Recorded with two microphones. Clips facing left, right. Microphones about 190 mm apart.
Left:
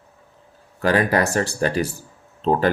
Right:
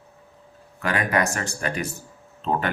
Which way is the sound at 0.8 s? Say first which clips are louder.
Left 5 dB; 35° left (ahead or behind).